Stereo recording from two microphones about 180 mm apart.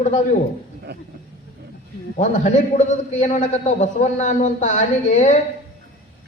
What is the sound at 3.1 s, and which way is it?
A man's voice, 40° left (ahead or behind).